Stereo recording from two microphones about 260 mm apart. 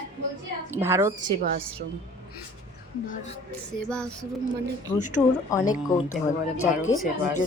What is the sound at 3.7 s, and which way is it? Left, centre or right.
Speech, centre.